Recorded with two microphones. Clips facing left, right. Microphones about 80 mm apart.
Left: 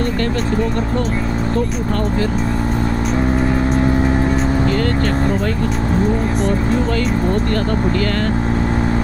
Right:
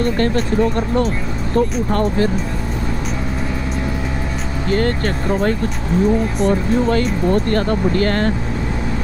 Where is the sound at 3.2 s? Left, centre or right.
Left.